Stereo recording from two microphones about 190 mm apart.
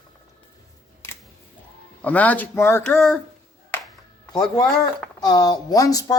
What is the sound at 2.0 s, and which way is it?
Speech, 10° left (ahead or behind).